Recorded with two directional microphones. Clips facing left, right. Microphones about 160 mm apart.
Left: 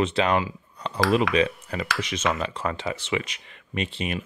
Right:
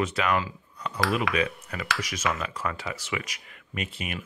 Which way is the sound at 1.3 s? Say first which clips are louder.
Left 5 dB; 25° left (ahead or behind).